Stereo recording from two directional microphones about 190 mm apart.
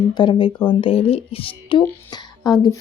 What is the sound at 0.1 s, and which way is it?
Speech, 25° left (ahead or behind).